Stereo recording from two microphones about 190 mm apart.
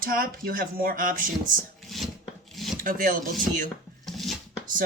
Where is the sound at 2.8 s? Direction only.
45° right (ahead or behind).